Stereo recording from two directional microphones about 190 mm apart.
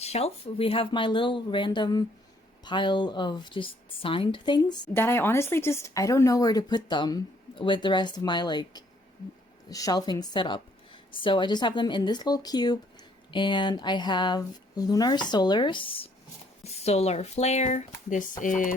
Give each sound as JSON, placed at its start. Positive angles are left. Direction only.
{"t": 0.0, "sound": "speech", "side_deg": 35}
{"t": 4.9, "sound": "speech", "side_deg": 10}